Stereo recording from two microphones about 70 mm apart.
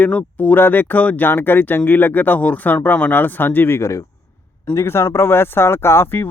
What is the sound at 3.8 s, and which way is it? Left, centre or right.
Speech, left.